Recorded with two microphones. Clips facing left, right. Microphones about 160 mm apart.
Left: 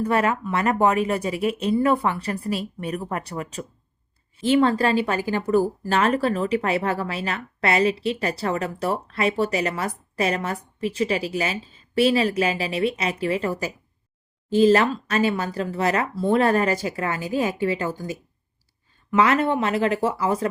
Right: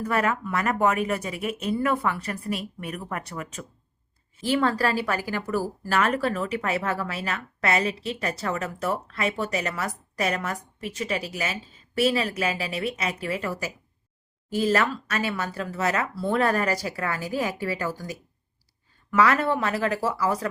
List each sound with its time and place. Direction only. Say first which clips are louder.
0.0 s speech: left 4 dB; 30° left (ahead or behind)
4.4 s speech: left 5 dB; 25° left (ahead or behind)